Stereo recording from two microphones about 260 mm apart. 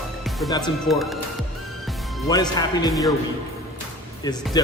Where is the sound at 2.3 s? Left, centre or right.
Centre.